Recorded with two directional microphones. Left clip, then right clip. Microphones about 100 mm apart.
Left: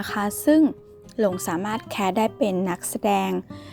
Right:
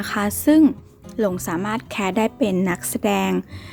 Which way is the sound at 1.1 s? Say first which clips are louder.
Right 1 dB; 60° left (ahead or behind).